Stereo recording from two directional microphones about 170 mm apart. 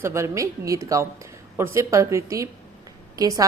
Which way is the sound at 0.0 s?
15° right (ahead or behind).